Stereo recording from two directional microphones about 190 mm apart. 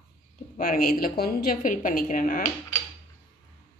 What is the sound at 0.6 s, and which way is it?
Speech, 50° left (ahead or behind).